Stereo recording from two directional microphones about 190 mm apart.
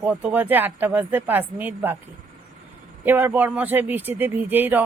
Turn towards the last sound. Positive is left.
turn(degrees=-10)  # may be behind; listen again after turning